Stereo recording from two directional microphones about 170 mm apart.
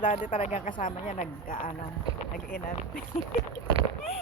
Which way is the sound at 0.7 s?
50° left (ahead or behind).